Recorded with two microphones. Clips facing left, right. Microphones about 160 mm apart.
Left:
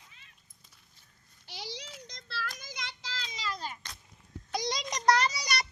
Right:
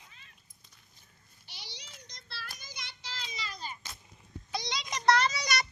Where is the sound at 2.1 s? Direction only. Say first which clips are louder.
Left 7 dB; 90° left.